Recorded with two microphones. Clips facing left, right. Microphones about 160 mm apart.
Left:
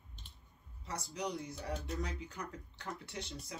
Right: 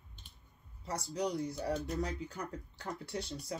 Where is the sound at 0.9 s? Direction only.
30° right (ahead or behind).